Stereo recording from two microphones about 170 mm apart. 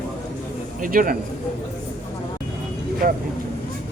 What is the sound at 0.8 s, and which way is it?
Speech, 55° right (ahead or behind).